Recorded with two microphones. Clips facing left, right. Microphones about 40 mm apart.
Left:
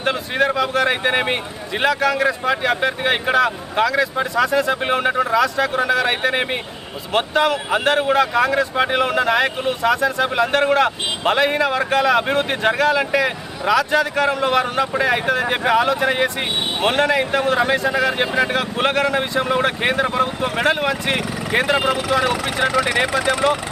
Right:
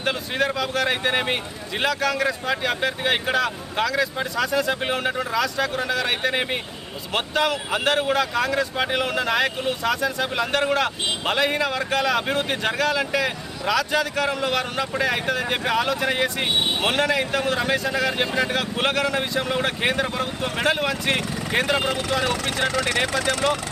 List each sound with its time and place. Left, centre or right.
0.0 s a man's voice: centre